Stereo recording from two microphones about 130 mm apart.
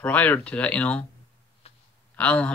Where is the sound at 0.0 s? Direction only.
10° left (ahead or behind).